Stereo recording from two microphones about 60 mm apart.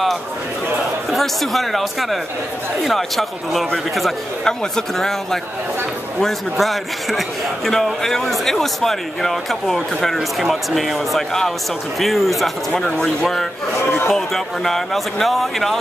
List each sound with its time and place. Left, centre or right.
1.1 s a man's voice: centre
6.5 s a man's voice: centre
12.8 s speech: centre
14.0 s a man's voice: centre